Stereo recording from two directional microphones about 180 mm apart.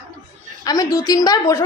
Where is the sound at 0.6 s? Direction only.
20° left (ahead or behind).